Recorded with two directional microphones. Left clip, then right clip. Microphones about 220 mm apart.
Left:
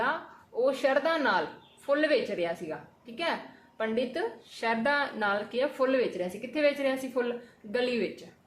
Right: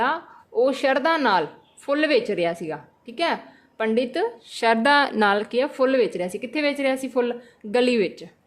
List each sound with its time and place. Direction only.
0.0 s a woman's voice: 50° right (ahead or behind)
3.8 s a woman's voice: 50° right (ahead or behind)